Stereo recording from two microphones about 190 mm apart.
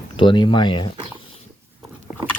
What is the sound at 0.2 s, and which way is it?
Speech, 25° left (ahead or behind).